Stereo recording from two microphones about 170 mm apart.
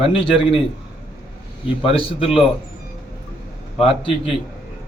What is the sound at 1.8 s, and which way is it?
Speech, 35° left (ahead or behind).